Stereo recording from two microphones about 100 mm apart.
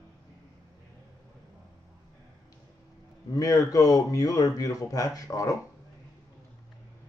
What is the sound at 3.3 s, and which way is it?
A man's voice, 35° left (ahead or behind).